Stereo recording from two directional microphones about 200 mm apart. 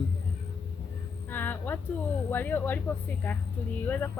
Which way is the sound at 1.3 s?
10° left (ahead or behind).